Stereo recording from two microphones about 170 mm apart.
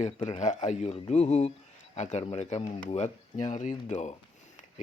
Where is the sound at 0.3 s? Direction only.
45° left (ahead or behind).